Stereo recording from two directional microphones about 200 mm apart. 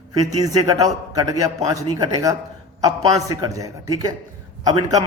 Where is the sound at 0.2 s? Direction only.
20° right (ahead or behind).